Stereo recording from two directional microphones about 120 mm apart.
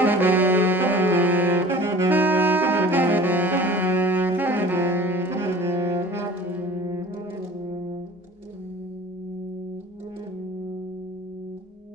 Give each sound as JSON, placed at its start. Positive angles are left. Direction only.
{"t": 0.0, "sound": "saxophone", "side_deg": -15}